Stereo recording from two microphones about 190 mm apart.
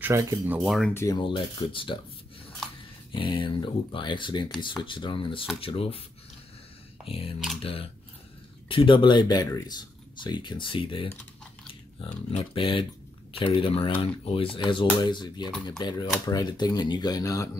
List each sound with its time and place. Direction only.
0.0 s speech: 15° right (ahead or behind)
0.6 s speech: centre (ahead or behind)
0.9 s speech: 20° left (ahead or behind)
3.1 s speech: 25° left (ahead or behind)
7.1 s speech: 30° left (ahead or behind)